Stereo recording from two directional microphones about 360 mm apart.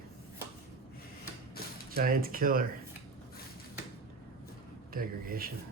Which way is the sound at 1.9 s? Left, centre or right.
Right.